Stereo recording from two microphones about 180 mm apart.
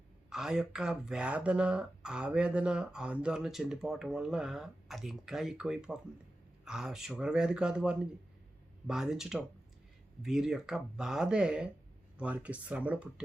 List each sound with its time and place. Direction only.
0.3 s speech: 5° right (ahead or behind)